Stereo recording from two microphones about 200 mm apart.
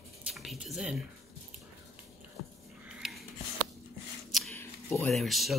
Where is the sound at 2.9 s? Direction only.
Centre (ahead or behind).